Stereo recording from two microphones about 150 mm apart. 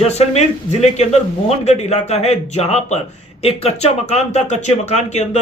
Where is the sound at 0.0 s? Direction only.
45° left (ahead or behind).